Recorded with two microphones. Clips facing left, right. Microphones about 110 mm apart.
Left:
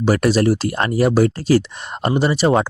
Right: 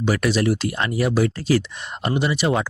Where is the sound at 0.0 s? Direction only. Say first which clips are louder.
Left 5 dB; 40° left (ahead or behind).